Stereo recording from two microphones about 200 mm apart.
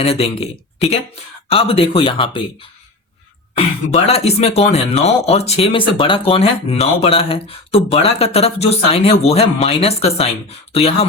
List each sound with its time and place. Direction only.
0.0 s speech: 30° left (ahead or behind)
3.5 s speech: 30° left (ahead or behind)